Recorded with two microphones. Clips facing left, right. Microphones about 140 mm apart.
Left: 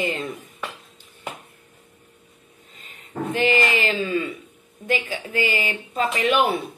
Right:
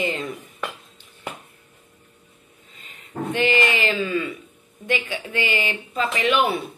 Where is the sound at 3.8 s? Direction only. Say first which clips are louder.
Even; 40° left (ahead or behind).